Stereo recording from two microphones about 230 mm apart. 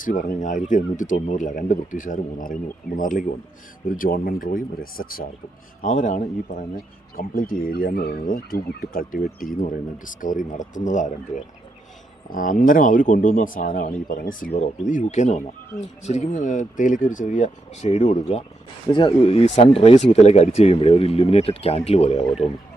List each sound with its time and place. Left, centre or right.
0.0 s speech: left